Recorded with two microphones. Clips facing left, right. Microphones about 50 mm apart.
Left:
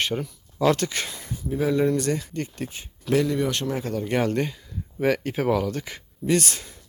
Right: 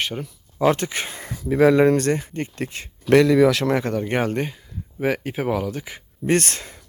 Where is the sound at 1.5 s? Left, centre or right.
Right.